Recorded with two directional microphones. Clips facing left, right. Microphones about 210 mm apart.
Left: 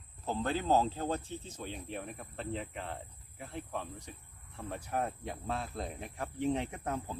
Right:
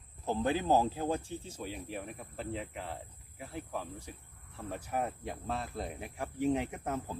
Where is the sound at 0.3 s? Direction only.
15° right (ahead or behind).